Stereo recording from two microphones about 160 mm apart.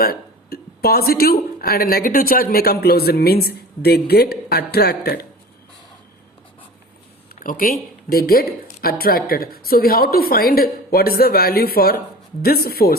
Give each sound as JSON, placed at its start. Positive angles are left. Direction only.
{"t": 0.0, "sound": "a woman's voice", "side_deg": 70}
{"t": 7.4, "sound": "a woman's voice", "side_deg": 60}